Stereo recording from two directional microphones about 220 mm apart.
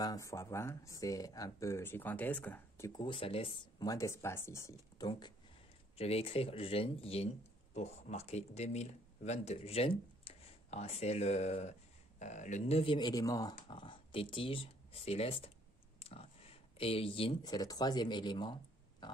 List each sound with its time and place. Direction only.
0.0 s speech: 15° left (ahead or behind)
2.9 s speech: 20° left (ahead or behind)